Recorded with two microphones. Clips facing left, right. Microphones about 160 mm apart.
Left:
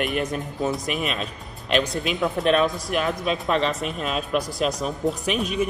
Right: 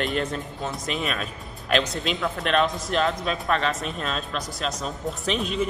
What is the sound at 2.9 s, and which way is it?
Speech, 10° left (ahead or behind).